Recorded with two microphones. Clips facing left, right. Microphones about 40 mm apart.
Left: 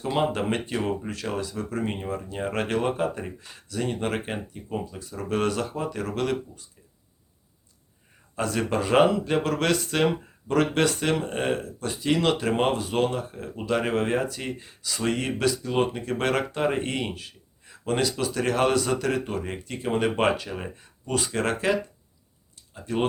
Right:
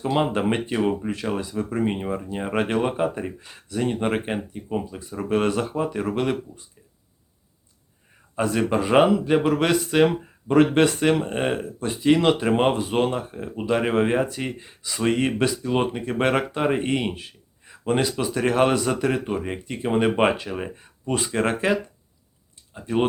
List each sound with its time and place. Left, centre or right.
0.2 s speech: right
8.4 s speech: centre
10.5 s speech: right
22.7 s speech: right